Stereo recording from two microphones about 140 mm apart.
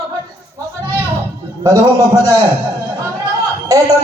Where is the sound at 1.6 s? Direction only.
25° right (ahead or behind).